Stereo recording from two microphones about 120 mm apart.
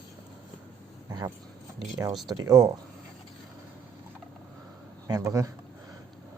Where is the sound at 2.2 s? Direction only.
35° right (ahead or behind).